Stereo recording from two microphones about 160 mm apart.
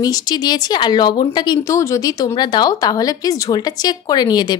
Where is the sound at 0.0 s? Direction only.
25° left (ahead or behind).